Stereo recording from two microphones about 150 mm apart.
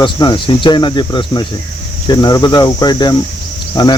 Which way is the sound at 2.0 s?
30° left (ahead or behind).